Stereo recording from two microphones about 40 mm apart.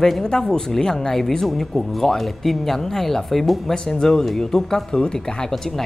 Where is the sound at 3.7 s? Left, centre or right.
Centre.